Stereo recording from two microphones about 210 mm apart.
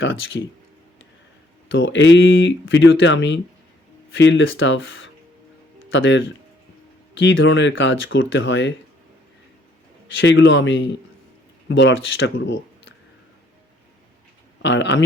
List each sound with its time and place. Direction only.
0.0 s speech: 65° left (ahead or behind)
1.6 s speech: 60° left (ahead or behind)
10.1 s speech: 65° left (ahead or behind)
14.6 s speech: 55° left (ahead or behind)